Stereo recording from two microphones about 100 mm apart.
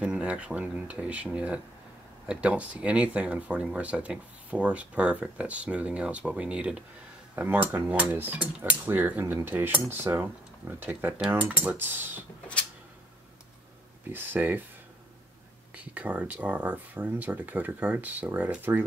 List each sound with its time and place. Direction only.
0.0 s speech: 10° right (ahead or behind)
9.3 s cutlery: 20° right (ahead or behind)
14.0 s cutlery: 20° right (ahead or behind)
15.7 s speech: 15° right (ahead or behind)